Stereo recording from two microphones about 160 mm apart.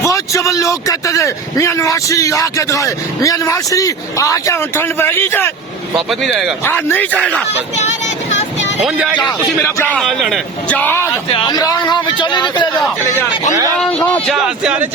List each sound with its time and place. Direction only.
0.0 s a man's voice: 20° left (ahead or behind)
6.7 s speech: 10° left (ahead or behind)
8.8 s speech: 5° right (ahead or behind)
10.8 s speech: 15° left (ahead or behind)
11.3 s a man's voice: 25° left (ahead or behind)
14.1 s speech: centre (ahead or behind)